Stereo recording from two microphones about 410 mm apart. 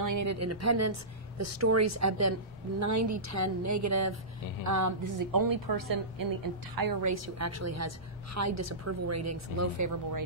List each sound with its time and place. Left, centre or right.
0.0 s a woman's voice: right